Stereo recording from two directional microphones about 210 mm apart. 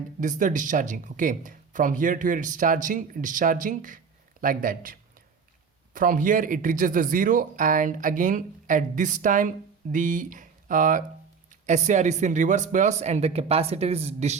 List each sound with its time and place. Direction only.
0.2 s speech: 35° right (ahead or behind)